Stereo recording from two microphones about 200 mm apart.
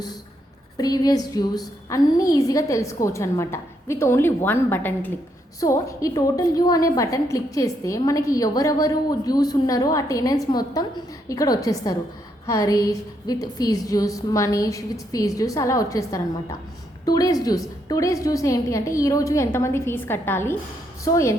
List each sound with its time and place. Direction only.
0.8 s a woman's voice: 20° left (ahead or behind)